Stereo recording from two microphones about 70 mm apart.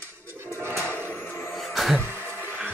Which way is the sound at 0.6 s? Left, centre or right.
Right.